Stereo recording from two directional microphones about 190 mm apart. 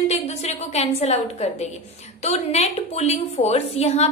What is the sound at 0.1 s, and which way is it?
A woman's voice, 35° left (ahead or behind).